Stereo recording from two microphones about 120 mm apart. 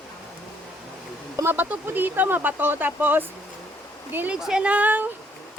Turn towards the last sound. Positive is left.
turn(degrees=-15)  # may be behind; listen again after turning